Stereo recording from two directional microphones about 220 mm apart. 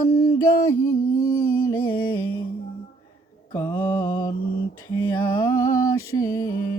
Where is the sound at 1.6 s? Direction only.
10° left (ahead or behind).